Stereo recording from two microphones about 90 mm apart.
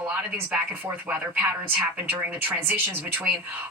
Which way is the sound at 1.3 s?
15° right (ahead or behind).